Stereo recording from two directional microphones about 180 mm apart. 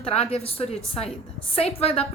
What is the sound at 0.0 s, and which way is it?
A woman's voice, 35° left (ahead or behind).